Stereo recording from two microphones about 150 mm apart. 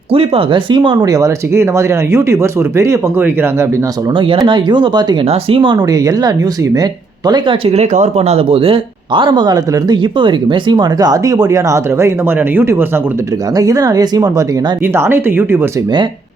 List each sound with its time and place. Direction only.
0.1 s speech: 35° right (ahead or behind); by 3.7 s 15° right (ahead or behind)
4.1 s speech: 35° right (ahead or behind); by 15.7 s 15° right (ahead or behind)